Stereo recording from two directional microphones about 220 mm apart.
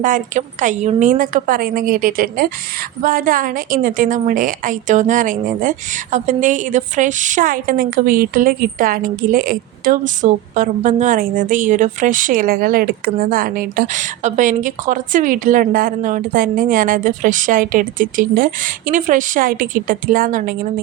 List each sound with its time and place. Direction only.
0.0 s a woman's voice: 35° right (ahead or behind)